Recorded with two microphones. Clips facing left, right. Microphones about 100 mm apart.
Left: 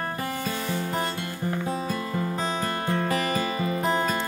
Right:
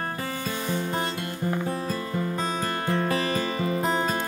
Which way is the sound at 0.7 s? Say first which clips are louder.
Right 2 dB; 20° right (ahead or behind).